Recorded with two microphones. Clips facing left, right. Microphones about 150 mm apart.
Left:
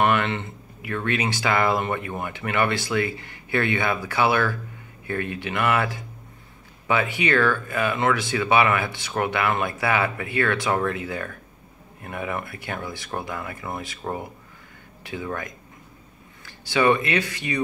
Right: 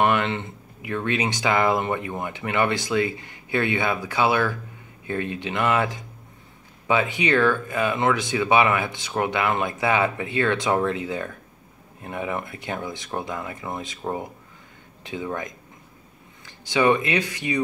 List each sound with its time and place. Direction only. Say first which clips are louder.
0.0 s speech: even; 15° right (ahead or behind)
15.0 s speech: right 1 dB; 20° right (ahead or behind)